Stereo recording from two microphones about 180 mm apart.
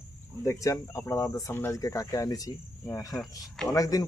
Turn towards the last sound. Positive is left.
turn(degrees=20)  # may be behind; listen again after turning